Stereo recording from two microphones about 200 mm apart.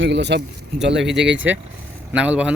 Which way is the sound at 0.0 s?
60° right (ahead or behind).